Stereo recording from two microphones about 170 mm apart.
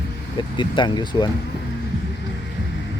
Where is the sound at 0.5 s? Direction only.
25° left (ahead or behind).